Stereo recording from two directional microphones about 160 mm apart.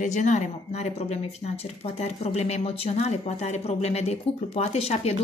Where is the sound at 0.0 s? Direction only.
50° left (ahead or behind).